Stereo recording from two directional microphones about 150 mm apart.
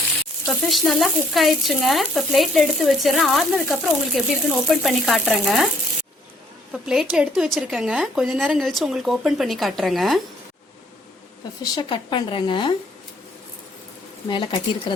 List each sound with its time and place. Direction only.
0.4 s sizzle: centre (ahead or behind)
6.8 s sizzle: 5° right (ahead or behind)
11.7 s speech: 30° left (ahead or behind)
14.3 s speech: 30° left (ahead or behind)